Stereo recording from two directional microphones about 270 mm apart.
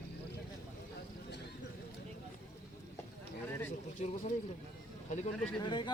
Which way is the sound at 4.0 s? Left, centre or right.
Left.